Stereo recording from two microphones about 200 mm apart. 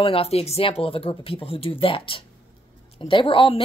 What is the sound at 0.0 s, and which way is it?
A woman's voice, 30° left (ahead or behind).